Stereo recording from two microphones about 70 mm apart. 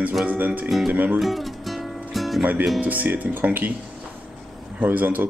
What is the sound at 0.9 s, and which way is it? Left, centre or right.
Speech, right.